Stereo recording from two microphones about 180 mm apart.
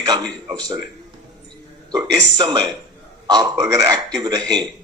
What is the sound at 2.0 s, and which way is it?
A man's voice, 25° right (ahead or behind).